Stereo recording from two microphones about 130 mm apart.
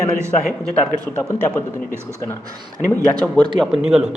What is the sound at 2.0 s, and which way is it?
Speech, 20° right (ahead or behind).